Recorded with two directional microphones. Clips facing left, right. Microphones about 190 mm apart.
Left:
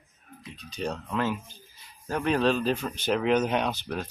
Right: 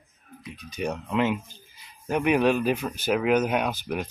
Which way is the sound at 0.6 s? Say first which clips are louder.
Right 2 dB; 15° right (ahead or behind).